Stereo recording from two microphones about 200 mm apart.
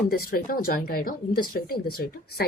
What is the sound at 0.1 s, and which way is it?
Speech, 45° left (ahead or behind).